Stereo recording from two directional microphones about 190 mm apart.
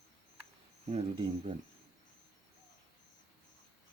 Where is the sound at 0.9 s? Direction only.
35° right (ahead or behind).